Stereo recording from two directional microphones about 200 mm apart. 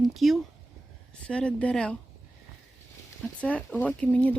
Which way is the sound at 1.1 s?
5° left (ahead or behind).